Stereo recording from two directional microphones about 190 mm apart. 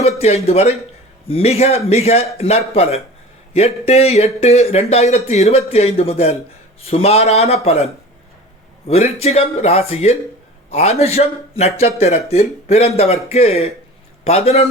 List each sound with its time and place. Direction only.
0.2 s a man's voice: 35° left (ahead or behind)
8.9 s a man's voice: 30° left (ahead or behind)